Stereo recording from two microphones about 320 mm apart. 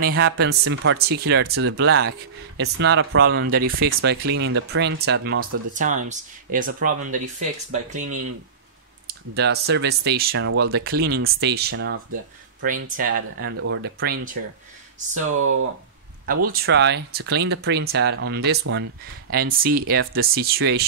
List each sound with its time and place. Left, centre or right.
0.0 s speech: right
5.7 s speech: right
9.3 s speech: right
12.8 s speech: right
16.4 s speech: right